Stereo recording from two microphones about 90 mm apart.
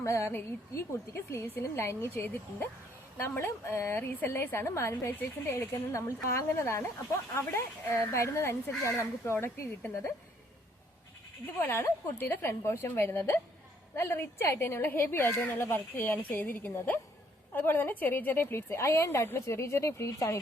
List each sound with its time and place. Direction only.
0.0 s speech: 30° left (ahead or behind)
11.7 s speech: 30° left (ahead or behind)